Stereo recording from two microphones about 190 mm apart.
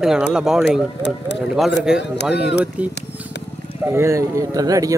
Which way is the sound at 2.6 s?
5° right (ahead or behind).